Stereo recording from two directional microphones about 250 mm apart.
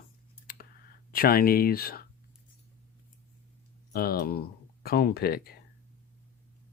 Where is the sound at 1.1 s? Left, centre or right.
Left.